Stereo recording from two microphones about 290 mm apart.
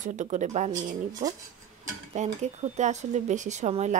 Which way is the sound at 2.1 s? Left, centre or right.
Right.